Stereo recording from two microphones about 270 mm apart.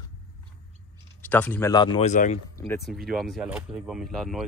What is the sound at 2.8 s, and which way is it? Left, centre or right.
Speech, centre.